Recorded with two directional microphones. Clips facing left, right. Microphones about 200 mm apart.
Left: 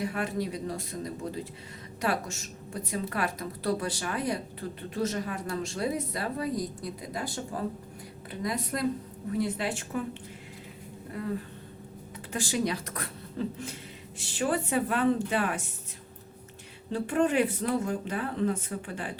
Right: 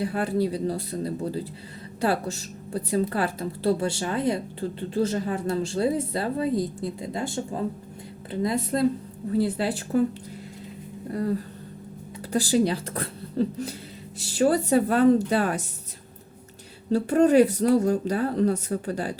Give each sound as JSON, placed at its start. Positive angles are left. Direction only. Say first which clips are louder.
{"t": 0.0, "sound": "a woman's voice", "louder": "right 6 dB", "side_deg": -30}
{"t": 11.1, "sound": "speech", "louder": "right 7 dB", "side_deg": -40}
{"t": 16.9, "sound": "speech", "louder": "right 8 dB", "side_deg": -40}